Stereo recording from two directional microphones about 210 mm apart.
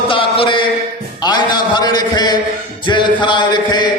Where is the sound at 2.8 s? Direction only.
20° left (ahead or behind).